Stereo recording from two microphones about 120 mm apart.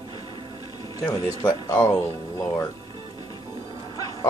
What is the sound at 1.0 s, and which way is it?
Speech, 35° left (ahead or behind).